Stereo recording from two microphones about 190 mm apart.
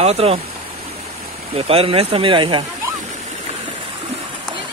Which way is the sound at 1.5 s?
30° right (ahead or behind).